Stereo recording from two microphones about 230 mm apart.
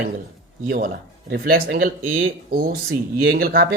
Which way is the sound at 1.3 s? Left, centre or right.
Right.